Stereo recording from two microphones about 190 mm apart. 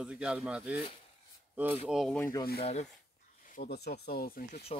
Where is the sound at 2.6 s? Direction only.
35° left (ahead or behind).